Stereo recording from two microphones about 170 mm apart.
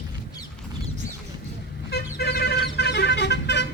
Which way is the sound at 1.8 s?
70° left (ahead or behind).